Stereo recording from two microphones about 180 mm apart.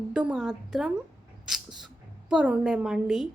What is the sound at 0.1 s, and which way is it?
Speech, 5° right (ahead or behind).